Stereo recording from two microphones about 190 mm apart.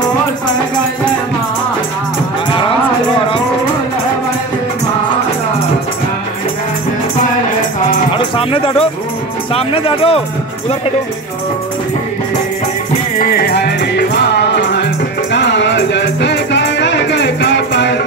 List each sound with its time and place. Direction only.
8.4 s speech: 30° left (ahead or behind)
13.4 s music: 55° left (ahead or behind)